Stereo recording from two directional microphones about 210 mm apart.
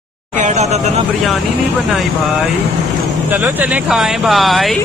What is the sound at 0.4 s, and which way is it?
Speech, 35° right (ahead or behind).